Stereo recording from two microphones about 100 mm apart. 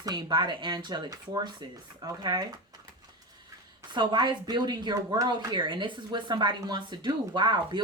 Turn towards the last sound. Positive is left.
turn(degrees=-50)  # may be behind; listen again after turning